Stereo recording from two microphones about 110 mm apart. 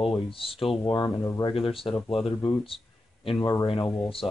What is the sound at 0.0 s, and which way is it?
Speech, 55° left (ahead or behind).